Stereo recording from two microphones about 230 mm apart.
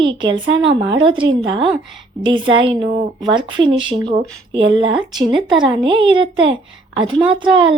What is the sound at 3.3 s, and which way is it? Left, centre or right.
Speech, right.